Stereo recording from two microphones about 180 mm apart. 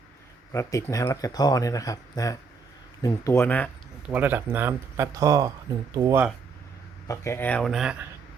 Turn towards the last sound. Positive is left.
turn(degrees=0)  # may be behind; listen again after turning